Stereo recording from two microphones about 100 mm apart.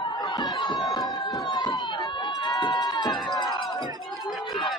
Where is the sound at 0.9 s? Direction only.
45° left (ahead or behind).